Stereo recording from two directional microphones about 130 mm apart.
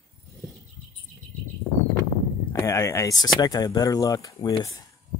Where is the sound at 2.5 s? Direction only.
25° left (ahead or behind).